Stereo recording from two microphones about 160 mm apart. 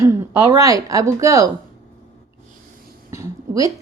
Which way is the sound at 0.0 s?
15° right (ahead or behind).